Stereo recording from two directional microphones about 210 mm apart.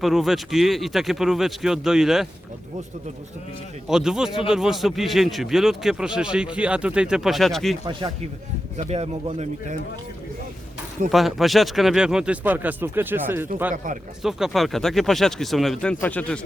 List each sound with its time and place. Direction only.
0.0 s a man's voice: centre (ahead or behind)
3.8 s a man's voice: 5° right (ahead or behind)
7.9 s speech: 25° right (ahead or behind)
11.1 s a man's voice: centre (ahead or behind)